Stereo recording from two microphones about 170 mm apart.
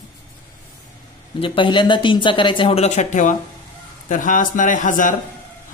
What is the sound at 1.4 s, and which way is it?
Speech, 30° left (ahead or behind).